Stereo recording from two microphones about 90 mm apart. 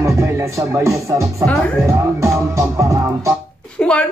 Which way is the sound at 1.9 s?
35° right (ahead or behind).